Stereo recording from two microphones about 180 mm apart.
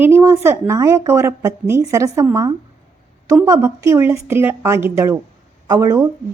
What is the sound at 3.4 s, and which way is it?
A woman's voice, 15° right (ahead or behind).